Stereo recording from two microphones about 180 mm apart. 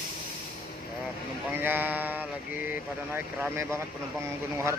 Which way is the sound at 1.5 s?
10° right (ahead or behind).